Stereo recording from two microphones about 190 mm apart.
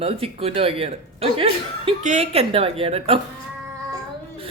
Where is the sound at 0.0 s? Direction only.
30° right (ahead or behind).